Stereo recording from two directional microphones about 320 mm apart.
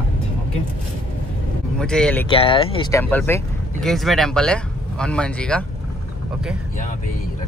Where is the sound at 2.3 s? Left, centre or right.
Centre.